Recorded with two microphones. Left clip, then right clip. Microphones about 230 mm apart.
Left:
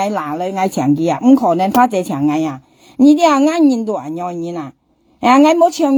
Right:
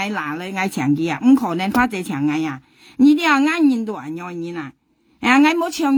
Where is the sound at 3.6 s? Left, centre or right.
Right.